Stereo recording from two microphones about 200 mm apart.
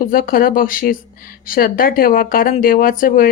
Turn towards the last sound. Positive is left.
turn(degrees=45)  # may be behind; listen again after turning